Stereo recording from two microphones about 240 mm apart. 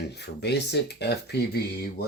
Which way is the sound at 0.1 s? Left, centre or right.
Left.